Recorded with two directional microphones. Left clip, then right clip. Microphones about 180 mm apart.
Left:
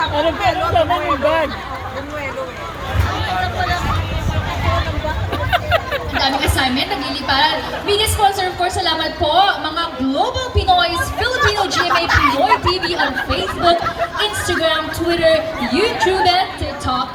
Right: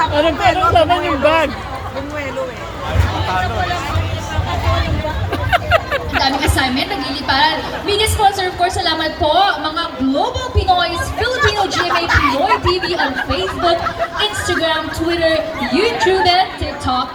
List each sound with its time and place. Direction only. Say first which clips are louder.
0.2 s speech: right 4 dB; 15° right (ahead or behind)
5.5 s a sound: right 3 dB; 20° right (ahead or behind)
6.1 s a woman's voice: right 1 dB; 45° left (ahead or behind)
11.3 s music: even; centre (ahead or behind)
12.5 s speech: even; 55° left (ahead or behind)
14.2 s speech: right 1 dB; 60° left (ahead or behind)